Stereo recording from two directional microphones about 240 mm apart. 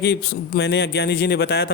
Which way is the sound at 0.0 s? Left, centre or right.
Left.